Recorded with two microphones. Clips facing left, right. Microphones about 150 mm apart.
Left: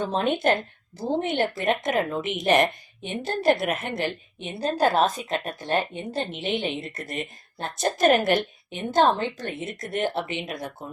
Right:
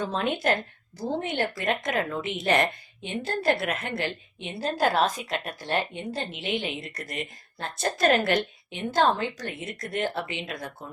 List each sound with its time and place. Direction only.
0.1 s a woman's voice: 20° left (ahead or behind)